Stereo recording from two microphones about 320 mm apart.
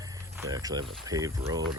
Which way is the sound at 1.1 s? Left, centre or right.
Centre.